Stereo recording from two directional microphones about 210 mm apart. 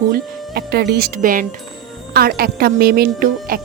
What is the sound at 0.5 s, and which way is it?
A woman's voice, 50° right (ahead or behind).